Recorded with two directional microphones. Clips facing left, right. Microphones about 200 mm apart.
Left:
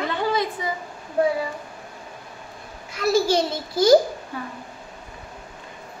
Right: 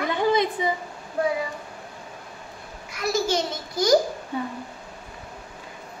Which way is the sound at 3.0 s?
30° left (ahead or behind).